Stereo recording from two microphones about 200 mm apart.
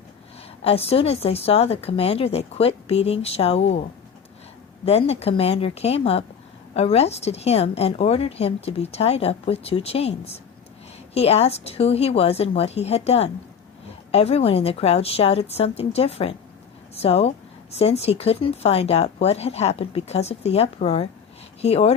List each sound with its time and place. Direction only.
0.6 s a woman's voice: 30° left (ahead or behind)
4.9 s a woman's voice: 30° left (ahead or behind)